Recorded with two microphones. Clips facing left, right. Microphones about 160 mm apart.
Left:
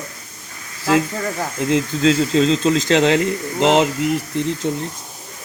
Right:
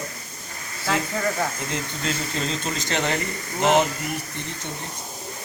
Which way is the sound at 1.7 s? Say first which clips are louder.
Left 12 dB; 90° left.